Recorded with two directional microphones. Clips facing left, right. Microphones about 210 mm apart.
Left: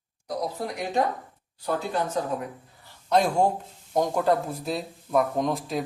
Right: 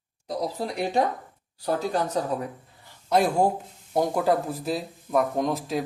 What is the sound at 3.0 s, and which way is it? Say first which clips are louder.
Speech: even; 5° right (ahead or behind).